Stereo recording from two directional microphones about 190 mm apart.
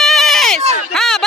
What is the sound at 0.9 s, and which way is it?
Run, centre (ahead or behind).